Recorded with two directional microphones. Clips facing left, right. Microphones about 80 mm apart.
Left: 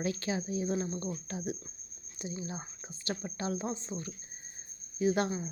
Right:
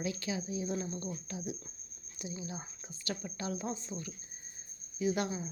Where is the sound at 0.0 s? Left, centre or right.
Left.